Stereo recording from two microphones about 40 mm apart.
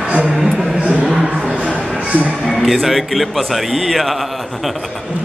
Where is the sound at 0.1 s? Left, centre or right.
Right.